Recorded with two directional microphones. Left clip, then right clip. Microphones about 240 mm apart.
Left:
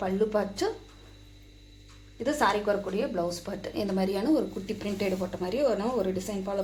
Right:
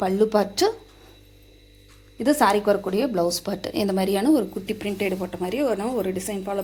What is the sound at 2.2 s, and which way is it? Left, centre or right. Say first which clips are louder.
A woman's voice: right 7 dB; right.